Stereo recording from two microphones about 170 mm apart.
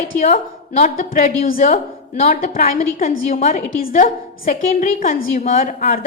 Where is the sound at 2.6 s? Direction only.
50° left (ahead or behind).